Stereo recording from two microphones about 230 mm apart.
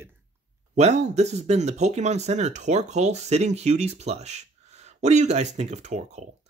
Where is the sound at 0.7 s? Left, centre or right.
Right.